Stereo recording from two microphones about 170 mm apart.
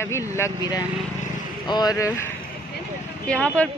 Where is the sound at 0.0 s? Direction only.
15° left (ahead or behind).